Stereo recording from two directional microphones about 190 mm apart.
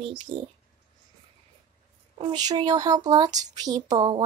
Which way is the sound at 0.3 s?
25° right (ahead or behind).